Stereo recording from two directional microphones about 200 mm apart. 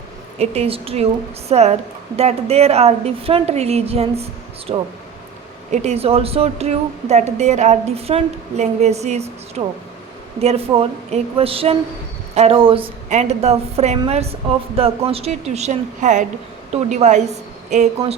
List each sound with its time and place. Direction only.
0.3 s speech: 30° right (ahead or behind)
5.7 s speech: 35° right (ahead or behind)